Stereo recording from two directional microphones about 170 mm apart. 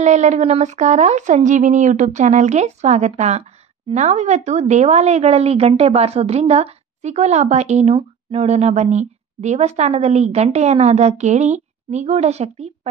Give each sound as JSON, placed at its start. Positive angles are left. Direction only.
{"t": 0.0, "sound": "speech", "side_deg": -45}